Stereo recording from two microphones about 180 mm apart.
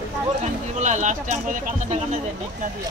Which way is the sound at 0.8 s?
40° right (ahead or behind).